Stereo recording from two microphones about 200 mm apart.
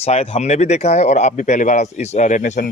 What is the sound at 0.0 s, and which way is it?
Speech, 30° left (ahead or behind).